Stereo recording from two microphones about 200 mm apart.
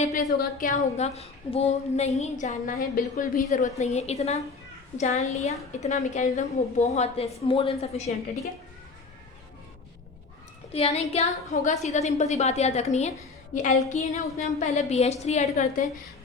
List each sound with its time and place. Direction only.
0.0 s a woman's voice: 35° left (ahead or behind)
10.7 s a woman's voice: 30° left (ahead or behind)